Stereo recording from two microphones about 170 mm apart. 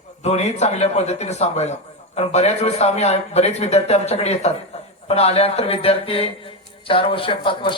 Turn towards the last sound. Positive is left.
turn(degrees=30)  # may be behind; listen again after turning